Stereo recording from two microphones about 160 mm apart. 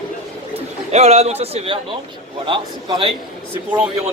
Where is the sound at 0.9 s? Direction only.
40° right (ahead or behind).